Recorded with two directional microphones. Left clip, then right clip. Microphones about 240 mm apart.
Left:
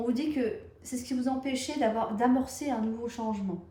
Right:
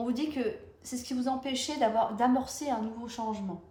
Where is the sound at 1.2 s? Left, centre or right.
Centre.